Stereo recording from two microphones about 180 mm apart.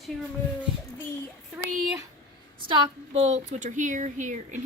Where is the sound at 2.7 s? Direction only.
25° right (ahead or behind); by 4.6 s 40° right (ahead or behind).